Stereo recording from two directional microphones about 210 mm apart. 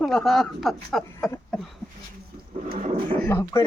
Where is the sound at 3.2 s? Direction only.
10° left (ahead or behind).